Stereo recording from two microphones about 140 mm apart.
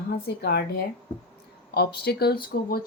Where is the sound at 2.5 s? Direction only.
90° left.